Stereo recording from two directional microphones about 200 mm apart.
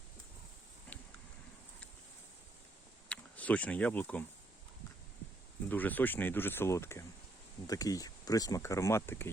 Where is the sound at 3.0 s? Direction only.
5° left (ahead or behind).